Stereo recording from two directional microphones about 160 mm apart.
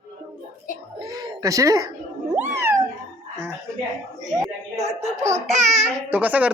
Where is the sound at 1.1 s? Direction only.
20° right (ahead or behind).